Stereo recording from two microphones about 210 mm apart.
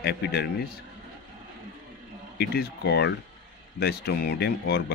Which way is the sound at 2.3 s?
50° left (ahead or behind).